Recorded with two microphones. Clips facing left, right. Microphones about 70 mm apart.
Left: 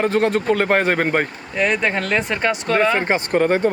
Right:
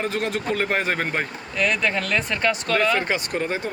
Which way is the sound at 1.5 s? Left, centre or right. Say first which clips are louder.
Left 3 dB; left.